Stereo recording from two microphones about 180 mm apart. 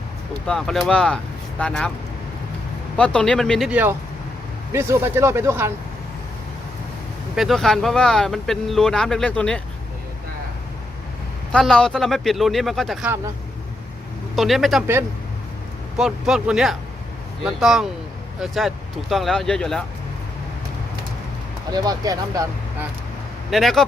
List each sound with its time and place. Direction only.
0.4 s speech: centre (ahead or behind)
3.0 s speech: 5° left (ahead or behind); by 5.7 s 15° right (ahead or behind)
7.3 s speech: centre (ahead or behind)
11.5 s speech: 5° left (ahead or behind)
14.3 s speech: centre (ahead or behind)
16.0 s speech: 5° right (ahead or behind)
21.7 s speech: 20° right (ahead or behind)
23.5 s speech: centre (ahead or behind)